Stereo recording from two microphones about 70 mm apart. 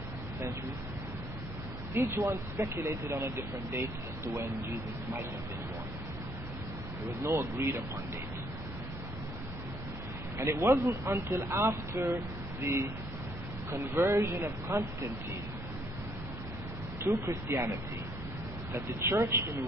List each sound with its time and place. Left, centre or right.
2.0 s speech: right
7.3 s speech: right
10.3 s speech: right
17.0 s speech: right
18.7 s speech: right